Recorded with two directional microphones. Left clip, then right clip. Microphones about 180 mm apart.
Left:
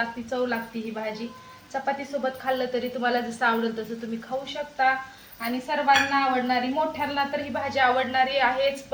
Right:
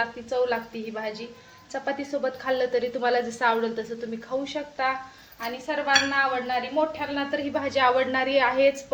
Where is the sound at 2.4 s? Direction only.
45° right (ahead or behind).